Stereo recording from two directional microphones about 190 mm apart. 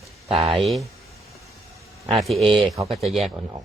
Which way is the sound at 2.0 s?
Centre (ahead or behind).